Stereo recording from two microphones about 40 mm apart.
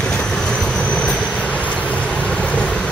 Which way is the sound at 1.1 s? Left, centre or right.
Left.